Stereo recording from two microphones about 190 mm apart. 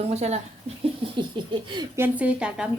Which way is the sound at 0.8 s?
30° right (ahead or behind).